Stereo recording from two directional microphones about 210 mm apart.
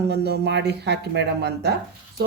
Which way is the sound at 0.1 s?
55° right (ahead or behind).